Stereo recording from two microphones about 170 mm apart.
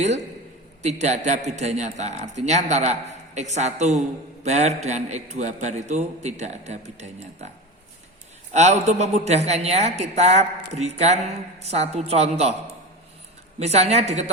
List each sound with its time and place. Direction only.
0.8 s a man's voice: 40° right (ahead or behind)
8.5 s a man's voice: 40° right (ahead or behind)
13.6 s a man's voice: 40° right (ahead or behind)